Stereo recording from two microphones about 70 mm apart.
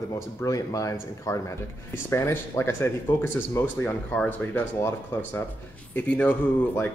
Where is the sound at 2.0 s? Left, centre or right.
Left.